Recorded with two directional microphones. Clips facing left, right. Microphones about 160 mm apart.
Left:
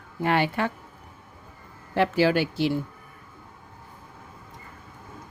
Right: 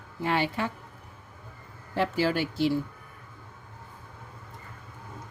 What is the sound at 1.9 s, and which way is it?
Speech, 75° left (ahead or behind).